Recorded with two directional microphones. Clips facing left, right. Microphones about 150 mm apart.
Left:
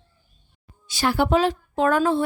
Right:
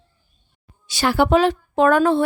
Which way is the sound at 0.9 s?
80° right.